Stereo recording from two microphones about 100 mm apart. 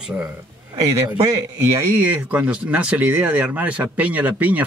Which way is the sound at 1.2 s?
30° right (ahead or behind).